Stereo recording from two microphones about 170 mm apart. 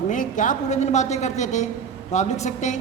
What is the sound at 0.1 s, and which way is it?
A woman's voice, 50° left (ahead or behind).